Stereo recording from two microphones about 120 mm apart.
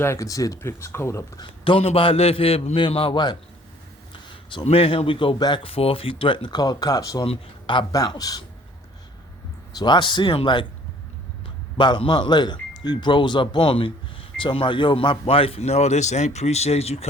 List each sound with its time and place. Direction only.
0.0 s speech: 25° left (ahead or behind)
1.4 s speech: 45° left (ahead or behind)
4.1 s a sound: 40° left (ahead or behind)
4.6 s speech: 50° left (ahead or behind); by 7.3 s 30° left (ahead or behind)
7.3 s speech: 45° left (ahead or behind)
7.9 s speech: 30° left (ahead or behind)
9.7 s speech: 40° left (ahead or behind); by 17.1 s 60° left (ahead or behind)